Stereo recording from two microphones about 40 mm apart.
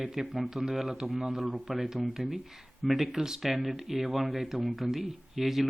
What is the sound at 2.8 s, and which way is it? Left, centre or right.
Speech, centre.